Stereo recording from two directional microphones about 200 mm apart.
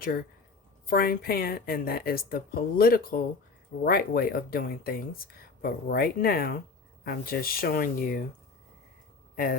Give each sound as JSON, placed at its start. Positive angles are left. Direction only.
{"t": 0.9, "sound": "speech", "side_deg": 50}
{"t": 9.3, "sound": "speech", "side_deg": 45}